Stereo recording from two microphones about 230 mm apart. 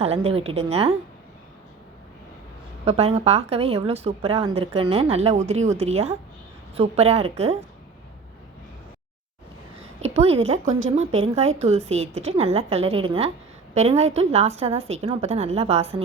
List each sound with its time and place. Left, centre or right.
0.0 s a woman's voice: right
2.8 s a woman's voice: right
10.0 s a woman's voice: right